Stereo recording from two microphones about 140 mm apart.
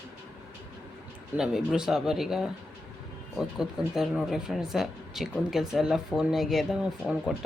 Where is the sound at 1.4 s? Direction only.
5° right (ahead or behind).